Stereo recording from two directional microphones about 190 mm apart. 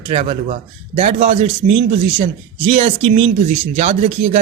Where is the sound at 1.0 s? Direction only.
40° right (ahead or behind).